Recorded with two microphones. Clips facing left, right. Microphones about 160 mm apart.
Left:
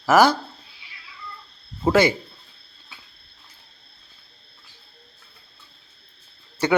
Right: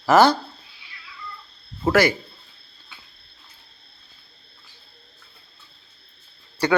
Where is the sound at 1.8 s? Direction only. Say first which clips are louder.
Left 1 dB; 25° left (ahead or behind).